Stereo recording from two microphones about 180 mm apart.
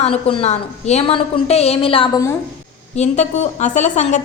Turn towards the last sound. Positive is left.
turn(degrees=40)  # may be behind; listen again after turning